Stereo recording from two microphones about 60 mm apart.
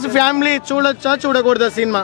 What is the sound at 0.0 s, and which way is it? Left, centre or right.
Speech, centre.